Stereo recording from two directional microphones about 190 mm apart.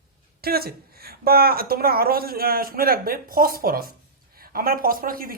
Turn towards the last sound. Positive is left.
turn(degrees=-50)  # may be behind; listen again after turning